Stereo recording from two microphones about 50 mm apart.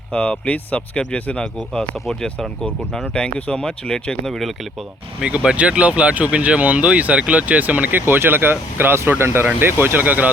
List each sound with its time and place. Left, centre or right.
0.1 s speech: left
3.0 s speech: left; by 4.5 s centre
5.2 s speech: centre; by 9.5 s right
9.8 s speech: right